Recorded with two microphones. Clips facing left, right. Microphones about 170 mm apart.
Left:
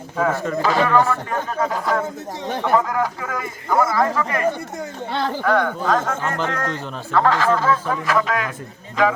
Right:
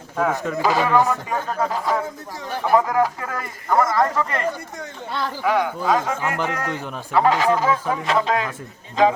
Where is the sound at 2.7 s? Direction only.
10° right (ahead or behind).